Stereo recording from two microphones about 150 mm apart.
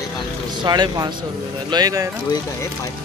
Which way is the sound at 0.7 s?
30° right (ahead or behind).